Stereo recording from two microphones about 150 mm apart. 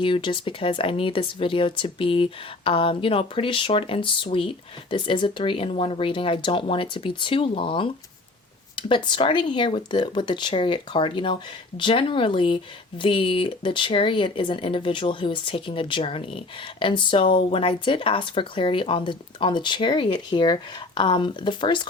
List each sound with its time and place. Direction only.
0.0 s speech: 35° left (ahead or behind)